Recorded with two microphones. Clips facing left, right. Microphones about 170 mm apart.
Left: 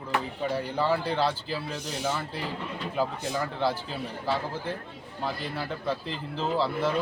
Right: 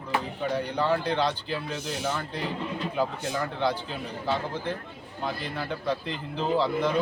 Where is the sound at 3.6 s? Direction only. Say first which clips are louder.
Right 1 dB; 5° left (ahead or behind).